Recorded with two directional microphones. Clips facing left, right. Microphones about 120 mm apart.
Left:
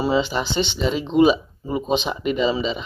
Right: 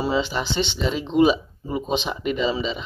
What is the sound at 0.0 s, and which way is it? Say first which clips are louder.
Speech: left 3 dB; 10° left (ahead or behind).